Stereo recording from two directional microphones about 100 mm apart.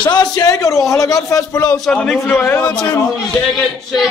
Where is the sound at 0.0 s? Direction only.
40° left (ahead or behind).